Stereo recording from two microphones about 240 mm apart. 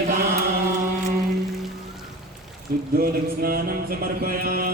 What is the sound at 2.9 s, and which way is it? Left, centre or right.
Chant, right.